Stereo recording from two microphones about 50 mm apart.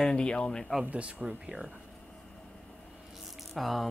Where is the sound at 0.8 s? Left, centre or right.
Right.